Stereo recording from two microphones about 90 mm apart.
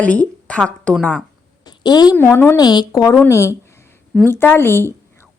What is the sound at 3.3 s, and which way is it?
Speech, 30° left (ahead or behind).